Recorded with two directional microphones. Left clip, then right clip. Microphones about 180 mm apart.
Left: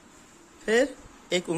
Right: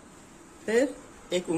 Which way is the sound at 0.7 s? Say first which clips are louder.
Left 2 dB; 60° left (ahead or behind).